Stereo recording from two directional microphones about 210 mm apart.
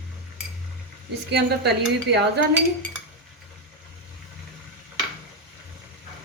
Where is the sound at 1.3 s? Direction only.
50° right (ahead or behind).